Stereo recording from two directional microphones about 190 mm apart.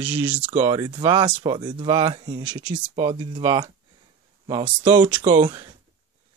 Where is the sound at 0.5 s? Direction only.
25° right (ahead or behind).